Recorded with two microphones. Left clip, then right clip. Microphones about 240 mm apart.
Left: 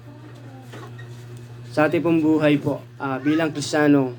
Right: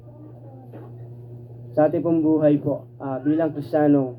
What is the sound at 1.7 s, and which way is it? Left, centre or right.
A man's voice, left.